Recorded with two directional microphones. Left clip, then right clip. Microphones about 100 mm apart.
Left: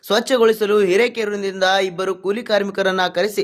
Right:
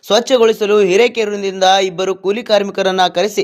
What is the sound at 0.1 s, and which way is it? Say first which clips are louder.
Speech: right 4 dB; 10° right (ahead or behind).